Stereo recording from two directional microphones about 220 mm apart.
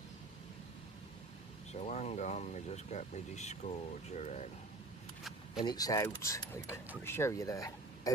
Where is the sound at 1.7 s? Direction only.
30° left (ahead or behind).